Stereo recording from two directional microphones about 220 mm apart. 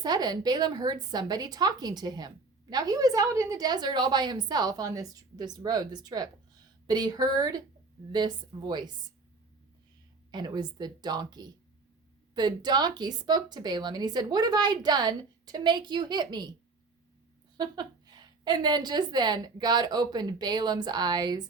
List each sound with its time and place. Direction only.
0.0 s a woman's voice: 20° right (ahead or behind)
10.3 s speech: 20° right (ahead or behind)
17.6 s speech: 20° right (ahead or behind)